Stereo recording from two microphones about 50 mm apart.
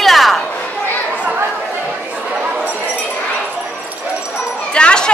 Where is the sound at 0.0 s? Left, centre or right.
Centre.